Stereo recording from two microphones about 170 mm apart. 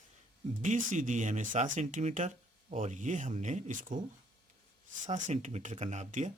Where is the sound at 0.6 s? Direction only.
45° right (ahead or behind).